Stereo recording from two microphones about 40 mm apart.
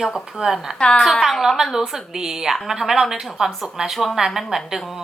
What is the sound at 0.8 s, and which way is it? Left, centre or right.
Speech, left.